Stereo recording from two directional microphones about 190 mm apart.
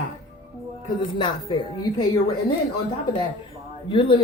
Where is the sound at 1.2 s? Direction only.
25° left (ahead or behind).